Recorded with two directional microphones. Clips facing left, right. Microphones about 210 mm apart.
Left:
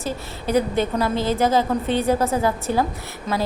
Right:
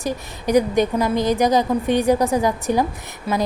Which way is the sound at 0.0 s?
15° right (ahead or behind).